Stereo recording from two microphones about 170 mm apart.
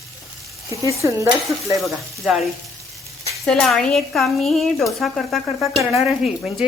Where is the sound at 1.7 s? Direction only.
Centre (ahead or behind).